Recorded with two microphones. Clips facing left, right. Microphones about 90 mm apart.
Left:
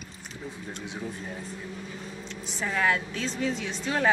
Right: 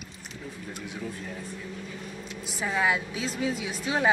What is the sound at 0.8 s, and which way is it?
Speech, 25° left (ahead or behind).